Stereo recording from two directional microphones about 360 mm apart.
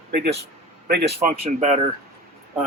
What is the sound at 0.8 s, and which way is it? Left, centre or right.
Speech, right.